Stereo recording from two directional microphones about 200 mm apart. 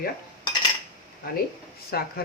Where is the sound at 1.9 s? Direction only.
50° left (ahead or behind).